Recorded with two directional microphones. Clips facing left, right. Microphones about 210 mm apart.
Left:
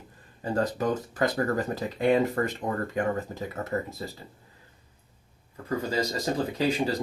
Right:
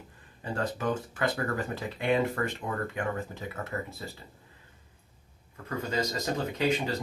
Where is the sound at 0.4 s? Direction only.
40° left (ahead or behind).